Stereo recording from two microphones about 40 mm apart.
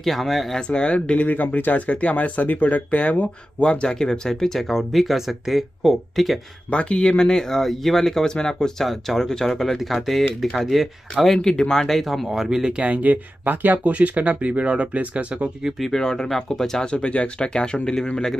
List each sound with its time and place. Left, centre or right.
0.0 s speech: centre
0.6 s speech: left
1.2 s speech: left
3.6 s speech: left; by 6.4 s centre
6.7 s speech: left; by 11.3 s centre
11.3 s speech: centre
12.4 s speech: centre
12.7 s speech: right
15.9 s speech: centre
16.9 s speech: left